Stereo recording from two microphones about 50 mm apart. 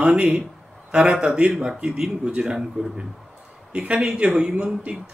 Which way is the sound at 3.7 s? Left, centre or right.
Right.